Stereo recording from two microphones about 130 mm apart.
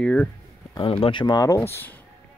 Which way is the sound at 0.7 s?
45° left (ahead or behind).